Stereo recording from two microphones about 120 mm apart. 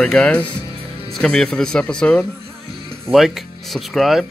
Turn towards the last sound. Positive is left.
turn(degrees=0)  # may be behind; listen again after turning